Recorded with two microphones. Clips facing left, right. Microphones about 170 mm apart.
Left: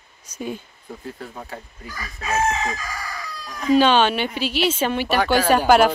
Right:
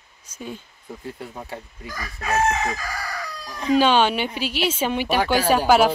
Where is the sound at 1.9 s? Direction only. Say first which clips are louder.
Right 1 dB; 50° right (ahead or behind).